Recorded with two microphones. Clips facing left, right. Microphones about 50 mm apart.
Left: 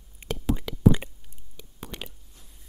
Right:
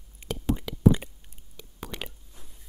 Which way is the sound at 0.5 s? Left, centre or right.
Left.